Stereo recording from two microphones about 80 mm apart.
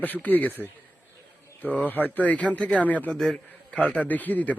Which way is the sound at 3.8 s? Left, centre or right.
Centre.